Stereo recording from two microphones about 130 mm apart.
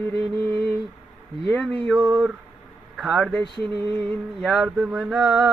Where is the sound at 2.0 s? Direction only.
15° right (ahead or behind).